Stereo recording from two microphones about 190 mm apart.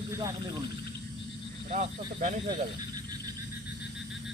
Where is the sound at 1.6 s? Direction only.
40° right (ahead or behind).